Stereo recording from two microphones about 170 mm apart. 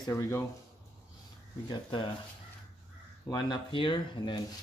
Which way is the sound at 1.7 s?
30° left (ahead or behind).